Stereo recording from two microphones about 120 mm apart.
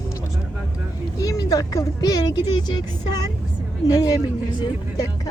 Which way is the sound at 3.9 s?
30° left (ahead or behind).